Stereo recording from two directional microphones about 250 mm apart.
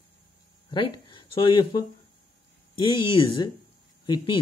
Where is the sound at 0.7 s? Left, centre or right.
Centre.